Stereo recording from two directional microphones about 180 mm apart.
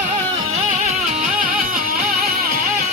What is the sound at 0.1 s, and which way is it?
Music, 40° right (ahead or behind).